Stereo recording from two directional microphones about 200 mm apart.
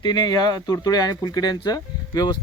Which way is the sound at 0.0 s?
20° left (ahead or behind).